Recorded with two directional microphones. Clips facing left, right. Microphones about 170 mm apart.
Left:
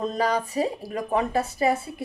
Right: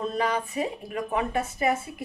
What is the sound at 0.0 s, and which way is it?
Speech, 40° left (ahead or behind).